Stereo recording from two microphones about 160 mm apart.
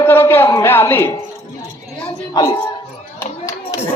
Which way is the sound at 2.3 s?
25° left (ahead or behind).